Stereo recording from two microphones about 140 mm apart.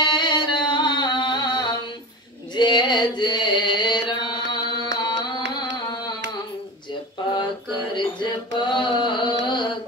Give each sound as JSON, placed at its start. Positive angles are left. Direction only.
{"t": 0.0, "sound": "music", "side_deg": 35}
{"t": 2.5, "sound": "chant", "side_deg": 30}
{"t": 7.9, "sound": "carnatic music", "side_deg": 35}